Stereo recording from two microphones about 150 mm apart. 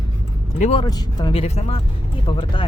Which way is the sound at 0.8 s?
30° left (ahead or behind).